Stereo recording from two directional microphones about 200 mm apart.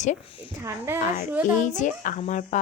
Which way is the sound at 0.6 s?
15° right (ahead or behind).